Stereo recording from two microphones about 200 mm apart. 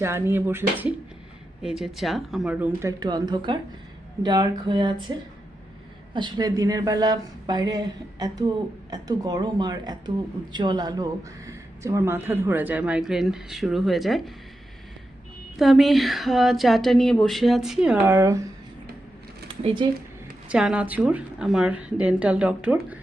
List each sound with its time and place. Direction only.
0.0 s a woman's voice: 10° right (ahead or behind)
3.0 s a woman's voice: 20° right (ahead or behind)
6.1 s a woman's voice: 20° right (ahead or behind); by 14.2 s centre (ahead or behind)
15.5 s a woman's voice: centre (ahead or behind)
19.6 s a woman's voice: 25° right (ahead or behind)
20.5 s a woman's voice: 5° right (ahead or behind)